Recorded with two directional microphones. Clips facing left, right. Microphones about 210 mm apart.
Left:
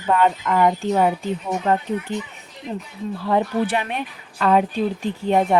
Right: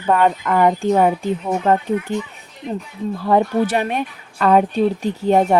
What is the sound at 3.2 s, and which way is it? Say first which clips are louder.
Speech: right 4 dB; 45° right (ahead or behind).